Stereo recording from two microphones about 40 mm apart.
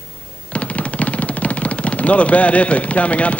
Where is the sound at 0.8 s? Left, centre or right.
Left.